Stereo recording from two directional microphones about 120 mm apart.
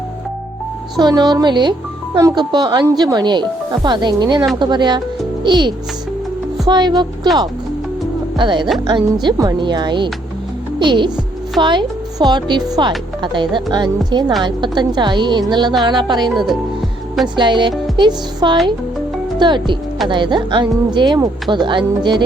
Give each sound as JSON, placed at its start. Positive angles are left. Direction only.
{"t": 0.9, "sound": "speech", "side_deg": -35}
{"t": 8.4, "sound": "speech", "side_deg": -40}
{"t": 17.3, "sound": "speech", "side_deg": -40}
{"t": 17.9, "sound": "music", "side_deg": -40}
{"t": 19.4, "sound": "speech", "side_deg": -40}